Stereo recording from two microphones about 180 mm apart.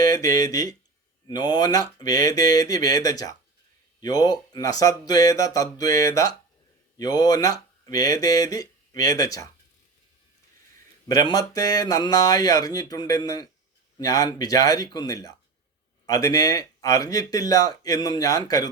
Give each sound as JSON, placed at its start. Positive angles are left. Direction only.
{"t": 0.0, "sound": "speech", "side_deg": 20}
{"t": 11.1, "sound": "speech", "side_deg": 20}